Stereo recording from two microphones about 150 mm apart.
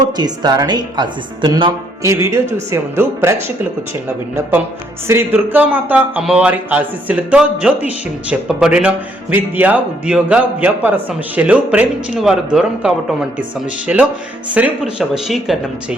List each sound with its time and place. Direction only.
0.2 s speech: 25° right (ahead or behind)
2.9 s a man's voice: 15° right (ahead or behind)
5.0 s a man's voice: 15° right (ahead or behind)